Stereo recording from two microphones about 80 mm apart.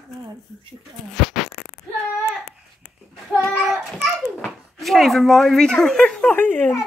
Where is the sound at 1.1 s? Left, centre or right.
Centre.